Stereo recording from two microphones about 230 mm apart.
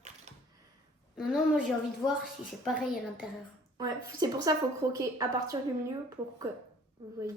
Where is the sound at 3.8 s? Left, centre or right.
Centre.